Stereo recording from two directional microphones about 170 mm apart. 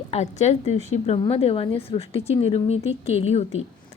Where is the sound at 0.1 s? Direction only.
40° left (ahead or behind).